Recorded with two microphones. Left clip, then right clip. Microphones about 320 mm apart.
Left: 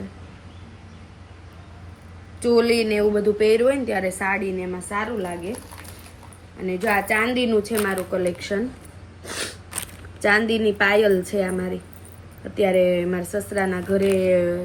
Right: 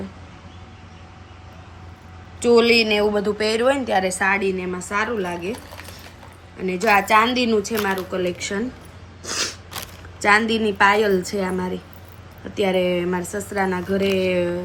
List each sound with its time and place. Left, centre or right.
2.4 s speech: centre
3.2 s speech: right
4.0 s a woman's voice: centre
6.7 s a woman's voice: centre
7.1 s speech: right
7.7 s a woman's voice: centre
9.2 s a sound: centre
10.2 s a woman's voice: centre